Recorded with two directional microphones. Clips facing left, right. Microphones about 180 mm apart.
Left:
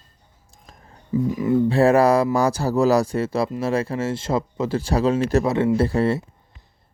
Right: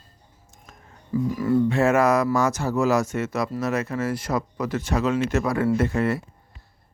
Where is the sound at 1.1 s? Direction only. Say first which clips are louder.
Left 2 dB; 20° left (ahead or behind).